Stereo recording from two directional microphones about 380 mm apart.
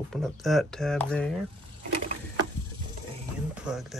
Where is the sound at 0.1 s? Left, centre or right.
Centre.